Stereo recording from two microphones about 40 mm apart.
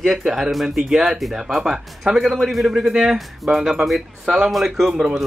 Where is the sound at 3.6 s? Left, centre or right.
Centre.